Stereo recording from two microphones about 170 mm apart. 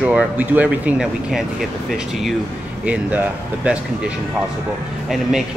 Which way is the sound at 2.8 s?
10° right (ahead or behind).